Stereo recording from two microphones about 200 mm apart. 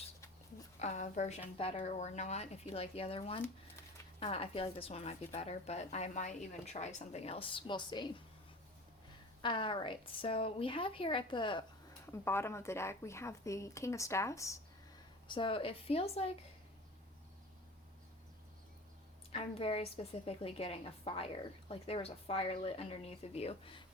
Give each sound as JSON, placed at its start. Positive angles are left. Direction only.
{"t": 0.8, "sound": "speech", "side_deg": 35}
{"t": 3.4, "sound": "a sound", "side_deg": 15}
{"t": 4.2, "sound": "speech", "side_deg": 30}
{"t": 9.4, "sound": "a woman's voice", "side_deg": 25}
{"t": 12.1, "sound": "a woman's voice", "side_deg": 10}
{"t": 19.3, "sound": "a woman's voice", "side_deg": 30}